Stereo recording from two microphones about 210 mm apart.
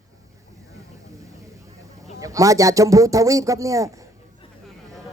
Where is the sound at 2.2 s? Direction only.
15° right (ahead or behind).